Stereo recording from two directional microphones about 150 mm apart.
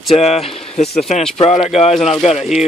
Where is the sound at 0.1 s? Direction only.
40° left (ahead or behind).